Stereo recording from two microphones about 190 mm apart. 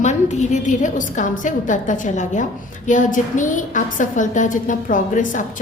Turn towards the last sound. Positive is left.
turn(degrees=45)  # may be behind; listen again after turning